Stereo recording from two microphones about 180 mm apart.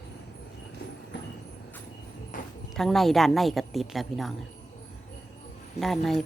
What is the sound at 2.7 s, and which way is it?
Speech, centre (ahead or behind).